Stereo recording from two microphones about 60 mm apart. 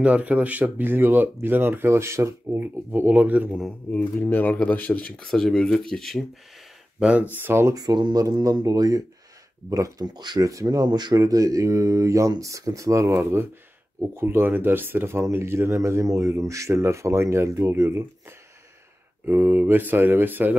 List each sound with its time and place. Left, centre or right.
0.0 s speech: right
2.6 s speech: right
3.9 s speech: left
4.3 s speech: left
5.2 s speech: centre
7.0 s speech: centre
7.4 s speech: right
7.7 s speech: right
9.7 s speech: right
13.2 s speech: right
19.2 s speech: right